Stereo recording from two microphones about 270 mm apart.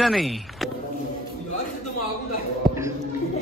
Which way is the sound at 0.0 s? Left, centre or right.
Centre.